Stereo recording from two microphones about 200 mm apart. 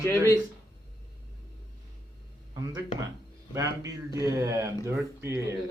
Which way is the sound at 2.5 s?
15° right (ahead or behind).